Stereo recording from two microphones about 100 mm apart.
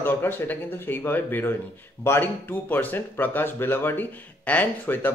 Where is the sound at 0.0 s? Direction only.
20° left (ahead or behind).